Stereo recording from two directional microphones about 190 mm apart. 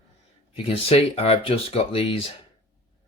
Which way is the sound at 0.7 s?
30° left (ahead or behind).